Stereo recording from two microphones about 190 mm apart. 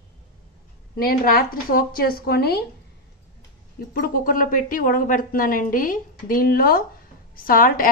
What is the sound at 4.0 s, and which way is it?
A woman's voice, 50° left (ahead or behind).